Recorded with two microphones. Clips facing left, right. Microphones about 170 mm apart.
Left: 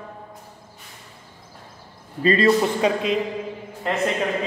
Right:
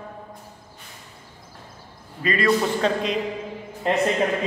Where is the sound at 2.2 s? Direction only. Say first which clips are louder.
Left 4 dB; 30° left (ahead or behind).